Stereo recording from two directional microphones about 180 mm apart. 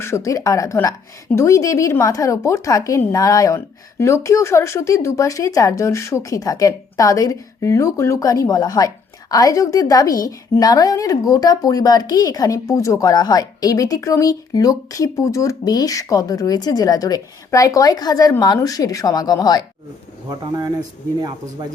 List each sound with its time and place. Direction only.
0.0 s speech: 15° left (ahead or behind)
20.4 s speech: 20° right (ahead or behind)